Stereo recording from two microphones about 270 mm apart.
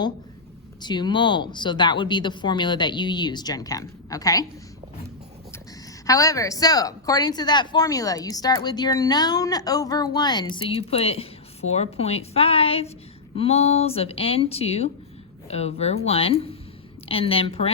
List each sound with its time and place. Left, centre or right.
0.8 s a woman's voice: centre
6.1 s a woman's voice: centre